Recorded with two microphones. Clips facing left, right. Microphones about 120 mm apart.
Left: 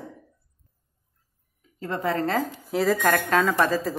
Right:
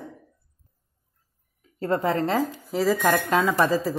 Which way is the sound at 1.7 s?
35° right (ahead or behind).